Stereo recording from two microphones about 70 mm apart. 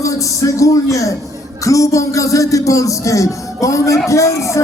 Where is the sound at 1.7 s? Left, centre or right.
Left.